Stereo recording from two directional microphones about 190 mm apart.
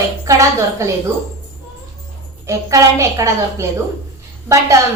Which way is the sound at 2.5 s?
15° right (ahead or behind).